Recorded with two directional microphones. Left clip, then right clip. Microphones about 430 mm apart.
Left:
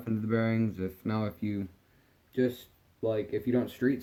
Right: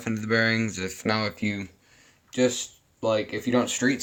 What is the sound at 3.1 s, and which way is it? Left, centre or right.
Speech, centre.